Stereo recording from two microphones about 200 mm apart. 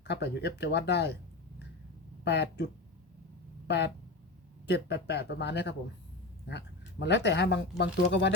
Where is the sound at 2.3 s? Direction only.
55° left (ahead or behind).